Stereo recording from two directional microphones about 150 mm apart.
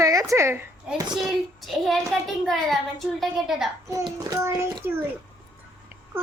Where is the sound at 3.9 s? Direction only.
20° right (ahead or behind).